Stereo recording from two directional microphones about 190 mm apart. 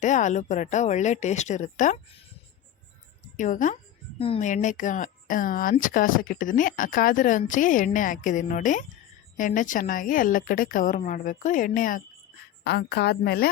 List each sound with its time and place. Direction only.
0.0 s speech: 40° left (ahead or behind)
3.3 s a woman's voice: 40° left (ahead or behind)
12.6 s a woman's voice: 60° left (ahead or behind)